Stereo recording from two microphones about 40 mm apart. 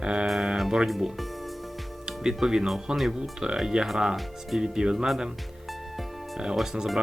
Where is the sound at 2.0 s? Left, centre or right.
Centre.